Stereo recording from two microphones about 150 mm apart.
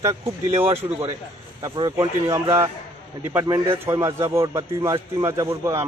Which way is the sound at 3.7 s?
20° right (ahead or behind).